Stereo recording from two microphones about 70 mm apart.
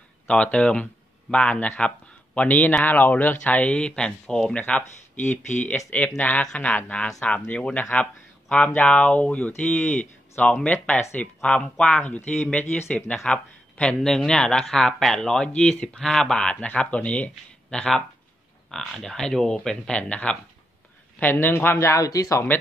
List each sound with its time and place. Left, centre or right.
0.3 s speech: centre
3.6 s speech: centre
4.6 s speech: left
6.1 s speech: centre
12.3 s speech: centre
20.0 s speech: centre
21.2 s speech: left
21.8 s speech: left